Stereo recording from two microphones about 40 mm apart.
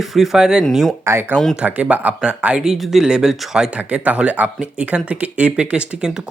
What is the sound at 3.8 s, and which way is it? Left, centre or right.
Speech, right.